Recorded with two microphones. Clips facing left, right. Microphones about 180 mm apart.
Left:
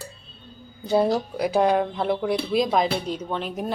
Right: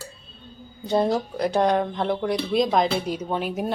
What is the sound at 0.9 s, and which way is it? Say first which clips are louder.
Speech: left 1 dB; 5° left (ahead or behind).